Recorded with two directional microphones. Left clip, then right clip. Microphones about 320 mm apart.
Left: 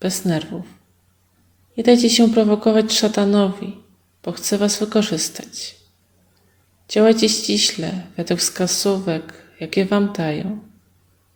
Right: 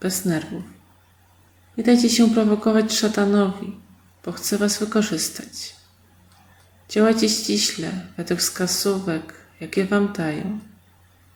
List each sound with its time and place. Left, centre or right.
0.0 s speech: centre
1.7 s speech: centre
6.8 s speech: centre